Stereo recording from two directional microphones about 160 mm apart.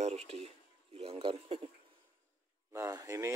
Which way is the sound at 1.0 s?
35° right (ahead or behind).